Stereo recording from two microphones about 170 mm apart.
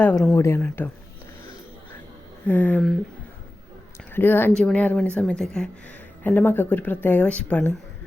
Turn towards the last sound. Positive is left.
turn(degrees=10)  # may be behind; listen again after turning